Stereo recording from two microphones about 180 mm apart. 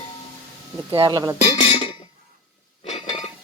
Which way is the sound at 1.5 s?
30° left (ahead or behind).